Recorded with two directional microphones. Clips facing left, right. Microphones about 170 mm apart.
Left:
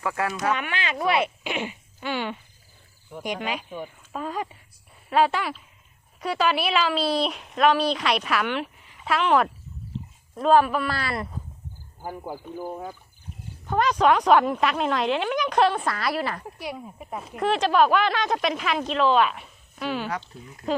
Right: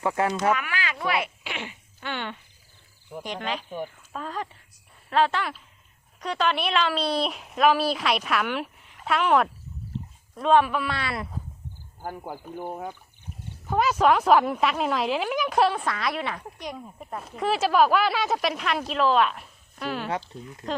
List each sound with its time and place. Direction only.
0.0 s speech: 25° right (ahead or behind)
0.5 s speech: 25° left (ahead or behind); by 11.3 s centre (ahead or behind)
13.7 s speech: 5° right (ahead or behind)
20.1 s speech: 25° right (ahead or behind)
20.6 s speech: 5° left (ahead or behind)